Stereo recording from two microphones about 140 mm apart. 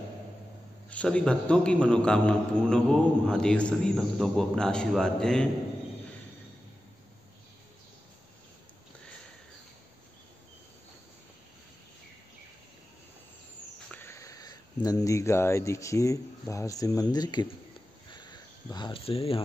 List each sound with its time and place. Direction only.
0.8 s a man's voice: 10° left (ahead or behind)
13.8 s speech: 15° left (ahead or behind)
18.1 s a sound: 30° left (ahead or behind)